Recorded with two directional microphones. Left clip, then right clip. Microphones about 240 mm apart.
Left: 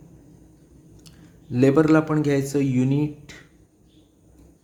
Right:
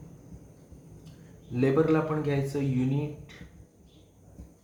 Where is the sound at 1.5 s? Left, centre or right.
Left.